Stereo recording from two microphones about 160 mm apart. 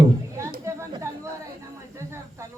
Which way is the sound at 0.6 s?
20° right (ahead or behind).